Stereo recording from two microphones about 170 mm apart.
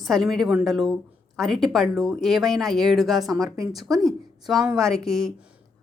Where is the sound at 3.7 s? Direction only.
Centre (ahead or behind).